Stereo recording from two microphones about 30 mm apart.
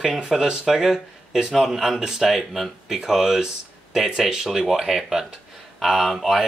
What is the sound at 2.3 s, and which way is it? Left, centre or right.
Speech, centre.